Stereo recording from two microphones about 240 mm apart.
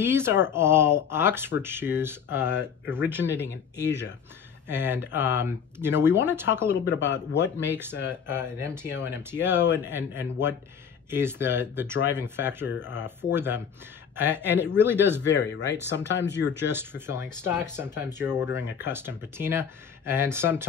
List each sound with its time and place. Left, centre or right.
0.0 s speech: centre
3.8 s speech: left
4.6 s speech: centre
6.9 s speech: left
7.7 s speech: centre
16.1 s speech: left
16.7 s speech: centre